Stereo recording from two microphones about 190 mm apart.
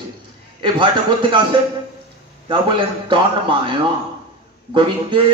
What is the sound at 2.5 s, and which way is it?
A man's voice, 25° right (ahead or behind).